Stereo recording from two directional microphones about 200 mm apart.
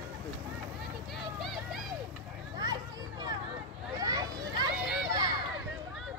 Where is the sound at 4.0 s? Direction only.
20° right (ahead or behind).